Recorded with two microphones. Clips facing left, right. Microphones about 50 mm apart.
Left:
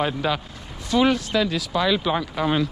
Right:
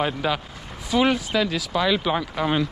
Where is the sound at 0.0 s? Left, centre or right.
Centre.